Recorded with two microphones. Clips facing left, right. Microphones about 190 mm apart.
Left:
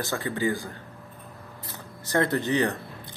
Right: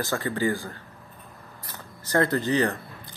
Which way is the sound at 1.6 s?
20° left (ahead or behind).